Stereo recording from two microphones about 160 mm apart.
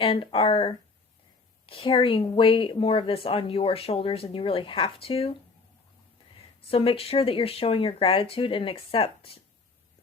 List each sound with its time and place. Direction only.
0.0 s speech: 35° left (ahead or behind)
6.7 s speech: 35° left (ahead or behind)